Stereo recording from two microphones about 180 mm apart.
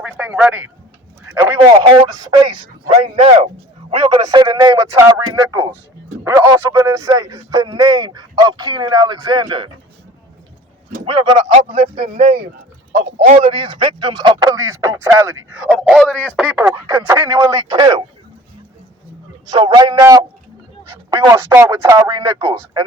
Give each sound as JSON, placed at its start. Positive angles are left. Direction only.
{"t": 0.0, "sound": "speech", "side_deg": -5}
{"t": 2.1, "sound": "speech", "side_deg": -25}
{"t": 3.9, "sound": "speech", "side_deg": -25}
{"t": 11.1, "sound": "speech", "side_deg": -25}
{"t": 15.5, "sound": "speech", "side_deg": -5}
{"t": 16.4, "sound": "speech", "side_deg": -10}
{"t": 19.5, "sound": "speech", "side_deg": -25}